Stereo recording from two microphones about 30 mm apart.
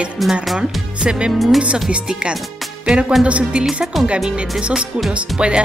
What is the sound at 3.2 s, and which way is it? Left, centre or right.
Speech, right.